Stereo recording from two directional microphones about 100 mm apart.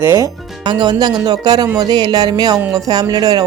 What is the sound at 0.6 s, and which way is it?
Speech, 45° right (ahead or behind).